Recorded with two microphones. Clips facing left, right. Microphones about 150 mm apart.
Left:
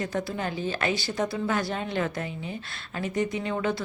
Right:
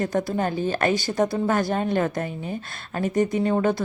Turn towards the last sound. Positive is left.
turn(degrees=-45)  # may be behind; listen again after turning